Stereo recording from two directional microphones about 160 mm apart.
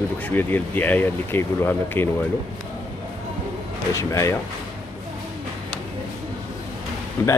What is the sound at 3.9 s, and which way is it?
Speech, 20° left (ahead or behind).